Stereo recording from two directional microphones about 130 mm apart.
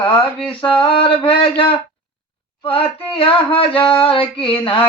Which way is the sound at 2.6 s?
45° left (ahead or behind).